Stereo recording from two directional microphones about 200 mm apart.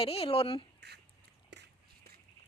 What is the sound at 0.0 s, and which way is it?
Speech, 30° left (ahead or behind).